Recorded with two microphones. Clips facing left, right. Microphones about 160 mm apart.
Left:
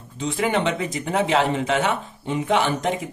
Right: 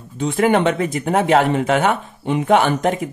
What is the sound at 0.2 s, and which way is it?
Speech, 55° right (ahead or behind).